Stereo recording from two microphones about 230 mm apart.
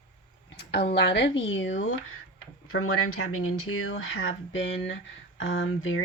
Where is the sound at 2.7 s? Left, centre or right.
Left.